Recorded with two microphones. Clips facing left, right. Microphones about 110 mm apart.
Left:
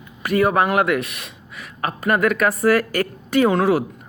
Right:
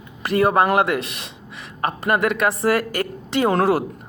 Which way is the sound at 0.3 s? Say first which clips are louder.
Right 1 dB; 30° right (ahead or behind).